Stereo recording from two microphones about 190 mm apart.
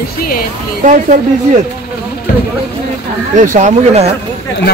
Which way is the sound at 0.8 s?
40° right (ahead or behind).